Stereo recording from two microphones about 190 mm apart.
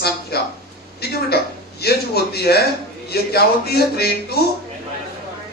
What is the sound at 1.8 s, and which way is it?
Speech, 55° left (ahead or behind).